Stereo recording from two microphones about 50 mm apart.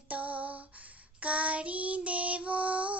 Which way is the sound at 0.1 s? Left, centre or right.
Right.